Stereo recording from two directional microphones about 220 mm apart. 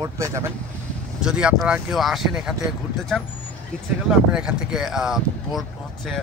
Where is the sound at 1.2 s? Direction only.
5° right (ahead or behind).